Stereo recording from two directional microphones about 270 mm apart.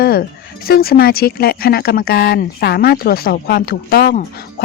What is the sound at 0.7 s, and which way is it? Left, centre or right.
Speech, left.